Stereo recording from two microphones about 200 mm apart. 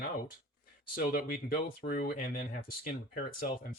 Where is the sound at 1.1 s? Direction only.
50° left (ahead or behind).